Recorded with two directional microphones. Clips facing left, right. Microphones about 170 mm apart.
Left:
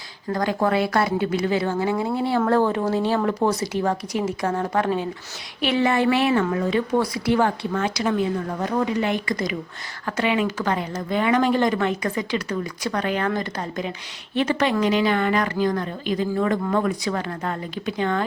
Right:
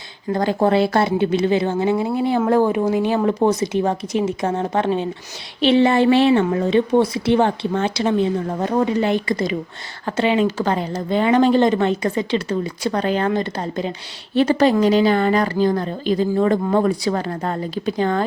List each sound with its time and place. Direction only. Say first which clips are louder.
0.3 s a woman's voice: right 4 dB; 25° right (ahead or behind)